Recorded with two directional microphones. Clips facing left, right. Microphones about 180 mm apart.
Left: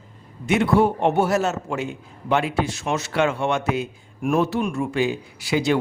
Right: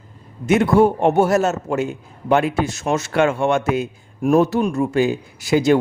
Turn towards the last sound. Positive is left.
turn(degrees=-45)  # may be behind; listen again after turning